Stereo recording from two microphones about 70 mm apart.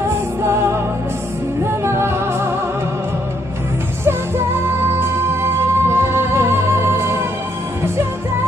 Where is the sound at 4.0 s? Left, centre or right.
Right.